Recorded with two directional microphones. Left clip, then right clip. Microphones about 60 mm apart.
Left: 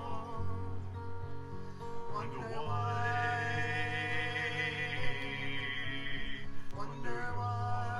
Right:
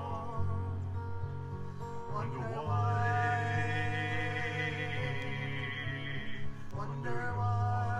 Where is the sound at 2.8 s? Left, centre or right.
Centre.